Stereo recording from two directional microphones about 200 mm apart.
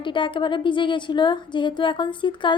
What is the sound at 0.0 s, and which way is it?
A woman's voice, 25° left (ahead or behind).